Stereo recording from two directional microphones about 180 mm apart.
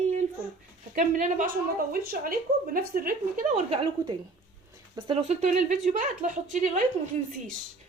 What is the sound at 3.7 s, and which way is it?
Speech, 25° right (ahead or behind).